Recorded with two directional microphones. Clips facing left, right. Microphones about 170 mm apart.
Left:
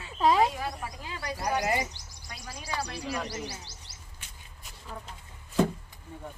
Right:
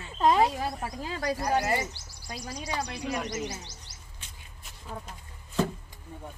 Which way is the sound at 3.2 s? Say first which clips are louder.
Right 3 dB; 30° left (ahead or behind).